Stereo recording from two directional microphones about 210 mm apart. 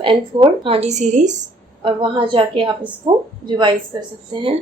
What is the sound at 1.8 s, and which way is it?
A woman's voice, 25° right (ahead or behind).